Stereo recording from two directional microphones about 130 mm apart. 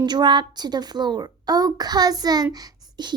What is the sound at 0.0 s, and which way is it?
A child's voice, 35° right (ahead or behind).